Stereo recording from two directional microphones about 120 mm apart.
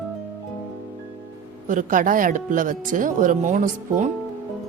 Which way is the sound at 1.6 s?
90° right.